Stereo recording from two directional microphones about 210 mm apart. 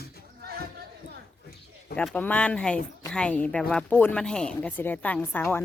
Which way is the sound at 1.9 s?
5° left (ahead or behind).